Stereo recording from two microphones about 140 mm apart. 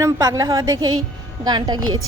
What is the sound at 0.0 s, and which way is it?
A woman's voice, 25° right (ahead or behind).